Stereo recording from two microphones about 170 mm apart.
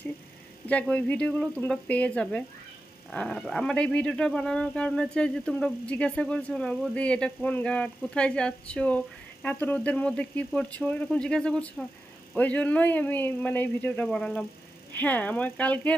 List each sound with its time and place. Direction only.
0.7 s speech: 10° left (ahead or behind)